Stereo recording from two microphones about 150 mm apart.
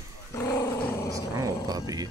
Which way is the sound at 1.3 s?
20° right (ahead or behind).